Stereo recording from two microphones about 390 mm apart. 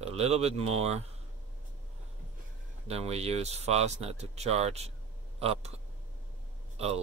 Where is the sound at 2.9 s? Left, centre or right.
Centre.